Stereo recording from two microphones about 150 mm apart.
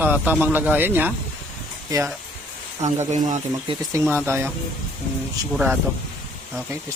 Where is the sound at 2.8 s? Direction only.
50° right (ahead or behind).